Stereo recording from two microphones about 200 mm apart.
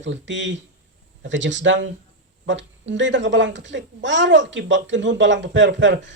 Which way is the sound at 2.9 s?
65° right (ahead or behind).